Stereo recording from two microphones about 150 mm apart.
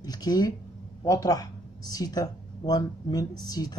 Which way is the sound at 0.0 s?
25° left (ahead or behind).